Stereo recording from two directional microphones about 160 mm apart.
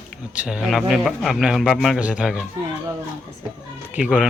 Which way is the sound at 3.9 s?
5° right (ahead or behind).